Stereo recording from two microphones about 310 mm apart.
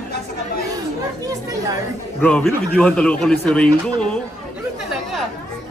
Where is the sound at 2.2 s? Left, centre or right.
Centre.